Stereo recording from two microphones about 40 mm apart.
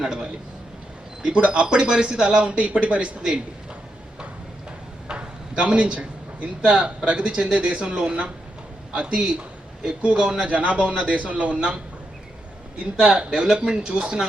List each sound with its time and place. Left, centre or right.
0.0 s a man's voice: centre
1.2 s speech: right
5.0 s drawer open or close: right
6.6 s a man's voice: right
10.5 s a man's voice: right
13.0 s speech: right